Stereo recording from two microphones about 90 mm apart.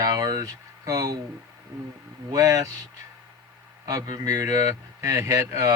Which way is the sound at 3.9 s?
40° right (ahead or behind).